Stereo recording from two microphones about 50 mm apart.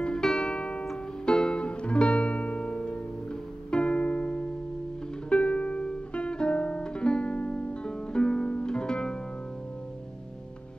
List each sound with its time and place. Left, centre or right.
0.0 s music: centre